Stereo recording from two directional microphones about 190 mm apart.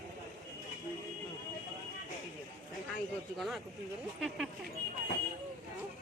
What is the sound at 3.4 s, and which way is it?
Speech, centre (ahead or behind).